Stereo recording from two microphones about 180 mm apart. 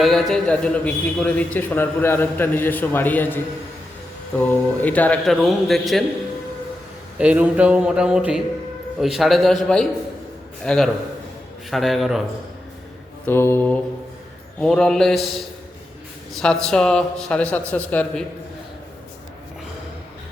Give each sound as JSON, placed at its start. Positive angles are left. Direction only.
{"t": 0.0, "sound": "a man's voice", "side_deg": 0}
{"t": 7.2, "sound": "a man's voice", "side_deg": -5}
{"t": 10.6, "sound": "a man's voice", "side_deg": 5}
{"t": 13.2, "sound": "a man's voice", "side_deg": 15}
{"t": 16.4, "sound": "a man's voice", "side_deg": 5}